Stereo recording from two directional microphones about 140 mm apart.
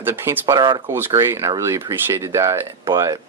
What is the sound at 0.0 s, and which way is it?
Speech, 20° right (ahead or behind).